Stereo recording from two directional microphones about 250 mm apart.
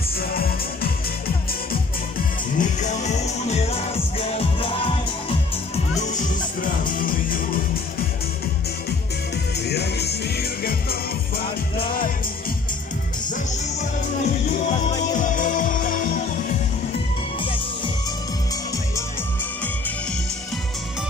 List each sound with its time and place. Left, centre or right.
2.6 s music: left
5.9 s music: left
9.7 s music: left
14.9 s music: left